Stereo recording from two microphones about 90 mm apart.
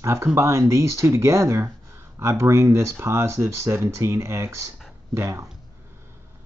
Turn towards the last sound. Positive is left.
turn(degrees=-35)  # may be behind; listen again after turning